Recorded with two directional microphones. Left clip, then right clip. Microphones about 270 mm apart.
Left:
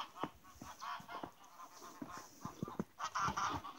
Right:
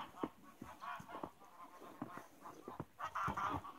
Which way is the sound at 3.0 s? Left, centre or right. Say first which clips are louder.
Left 2 dB; left.